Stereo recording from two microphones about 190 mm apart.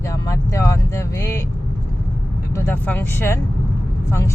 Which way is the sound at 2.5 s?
15° left (ahead or behind).